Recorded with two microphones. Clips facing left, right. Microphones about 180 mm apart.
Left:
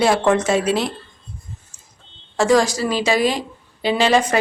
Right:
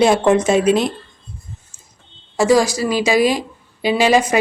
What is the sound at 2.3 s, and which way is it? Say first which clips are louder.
A woman's voice: right 2 dB; 10° right (ahead or behind).